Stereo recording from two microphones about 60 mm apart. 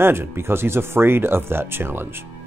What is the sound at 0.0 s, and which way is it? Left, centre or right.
Speech, right.